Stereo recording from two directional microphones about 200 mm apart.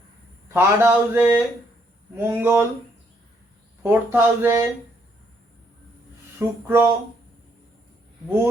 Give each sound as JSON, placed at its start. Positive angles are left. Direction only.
{"t": 0.4, "sound": "speech", "side_deg": -10}
{"t": 3.8, "sound": "speech", "side_deg": -10}
{"t": 6.7, "sound": "speech", "side_deg": -10}